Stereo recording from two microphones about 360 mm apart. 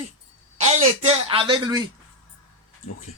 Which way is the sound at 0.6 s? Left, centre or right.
Centre.